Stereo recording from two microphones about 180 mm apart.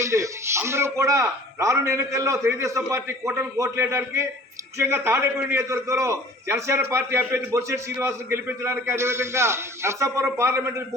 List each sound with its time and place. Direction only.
0.0 s a man's voice: 15° right (ahead or behind)